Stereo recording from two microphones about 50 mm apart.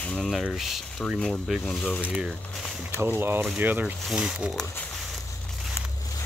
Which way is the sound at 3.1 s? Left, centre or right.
Right.